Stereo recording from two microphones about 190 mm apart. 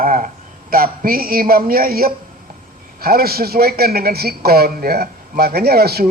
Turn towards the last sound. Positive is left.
turn(degrees=-55)  # may be behind; listen again after turning